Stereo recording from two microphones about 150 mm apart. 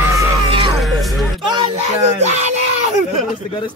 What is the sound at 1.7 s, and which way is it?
Speech, 45° right (ahead or behind).